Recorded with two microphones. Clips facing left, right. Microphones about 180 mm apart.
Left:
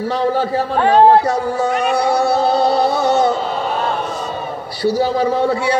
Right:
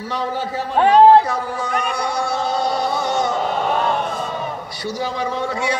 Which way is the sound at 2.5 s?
30° left (ahead or behind).